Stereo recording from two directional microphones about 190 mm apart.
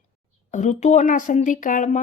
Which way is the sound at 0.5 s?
40° left (ahead or behind).